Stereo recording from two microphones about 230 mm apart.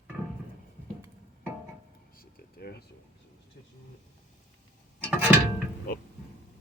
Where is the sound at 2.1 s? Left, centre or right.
Left.